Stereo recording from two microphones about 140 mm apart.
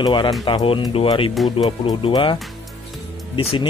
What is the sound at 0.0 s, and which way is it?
Speech, 35° left (ahead or behind).